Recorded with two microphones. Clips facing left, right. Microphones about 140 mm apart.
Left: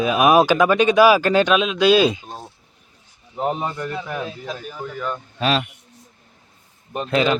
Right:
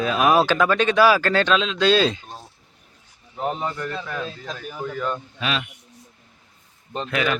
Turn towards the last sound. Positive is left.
turn(degrees=25)  # may be behind; listen again after turning